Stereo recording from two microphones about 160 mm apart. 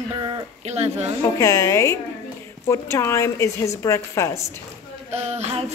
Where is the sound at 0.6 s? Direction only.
45° right (ahead or behind).